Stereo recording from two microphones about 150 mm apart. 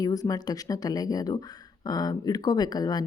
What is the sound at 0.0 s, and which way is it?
Speech, 25° left (ahead or behind).